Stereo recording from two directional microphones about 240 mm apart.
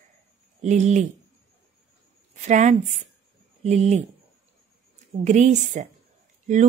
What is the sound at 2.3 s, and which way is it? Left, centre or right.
A woman's voice, right.